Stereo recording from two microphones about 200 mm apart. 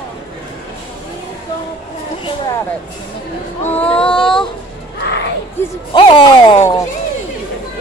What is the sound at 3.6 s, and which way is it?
Child singing, 5° left (ahead or behind).